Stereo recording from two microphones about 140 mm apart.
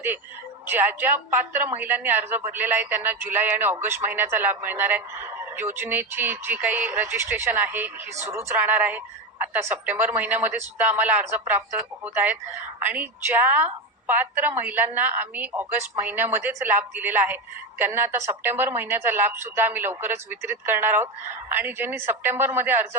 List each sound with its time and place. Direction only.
0.7 s a woman's voice: 15° right (ahead or behind)